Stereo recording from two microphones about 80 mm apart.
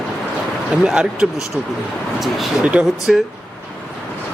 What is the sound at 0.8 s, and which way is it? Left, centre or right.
Speech, centre.